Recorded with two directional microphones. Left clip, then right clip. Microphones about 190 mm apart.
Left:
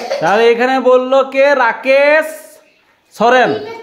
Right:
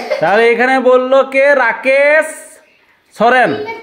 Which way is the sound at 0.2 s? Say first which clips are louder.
Even; 5° right (ahead or behind).